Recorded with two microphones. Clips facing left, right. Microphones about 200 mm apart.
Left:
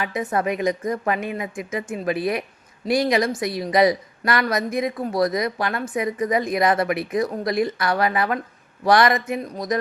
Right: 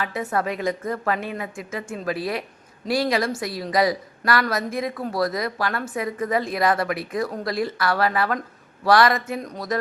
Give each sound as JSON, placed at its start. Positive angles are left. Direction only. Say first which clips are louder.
{"t": 0.0, "sound": "a woman's voice", "louder": "left 2 dB", "side_deg": 15}